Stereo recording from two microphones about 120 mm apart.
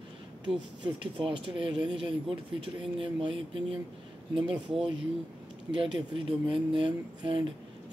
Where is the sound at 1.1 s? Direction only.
45° right (ahead or behind).